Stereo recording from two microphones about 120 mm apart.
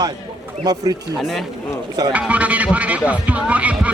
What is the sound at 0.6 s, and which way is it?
Speech, 35° right (ahead or behind).